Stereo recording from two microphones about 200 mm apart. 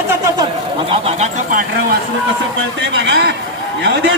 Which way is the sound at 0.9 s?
30° right (ahead or behind).